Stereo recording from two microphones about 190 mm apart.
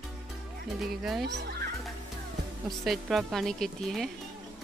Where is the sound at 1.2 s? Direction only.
65° right (ahead or behind).